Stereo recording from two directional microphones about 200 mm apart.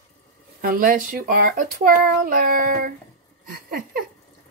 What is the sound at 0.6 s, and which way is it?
A child's voice, 45° right (ahead or behind).